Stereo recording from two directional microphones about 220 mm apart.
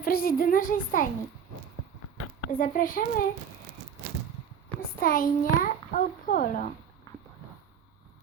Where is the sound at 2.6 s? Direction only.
40° left (ahead or behind).